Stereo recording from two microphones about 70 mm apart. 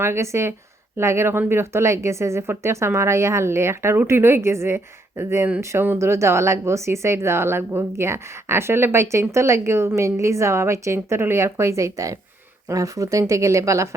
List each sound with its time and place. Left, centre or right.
0.0 s a woman's voice: right